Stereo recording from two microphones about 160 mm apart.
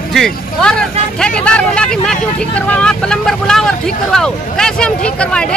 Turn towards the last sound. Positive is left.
turn(degrees=5)  # may be behind; listen again after turning